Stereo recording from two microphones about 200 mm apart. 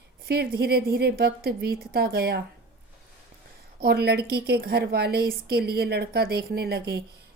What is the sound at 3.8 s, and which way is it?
A woman's voice, 55° right (ahead or behind).